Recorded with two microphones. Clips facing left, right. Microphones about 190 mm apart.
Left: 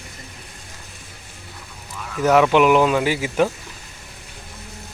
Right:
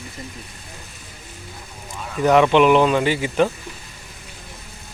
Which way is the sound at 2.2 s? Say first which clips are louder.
Right 1 dB; 5° left (ahead or behind).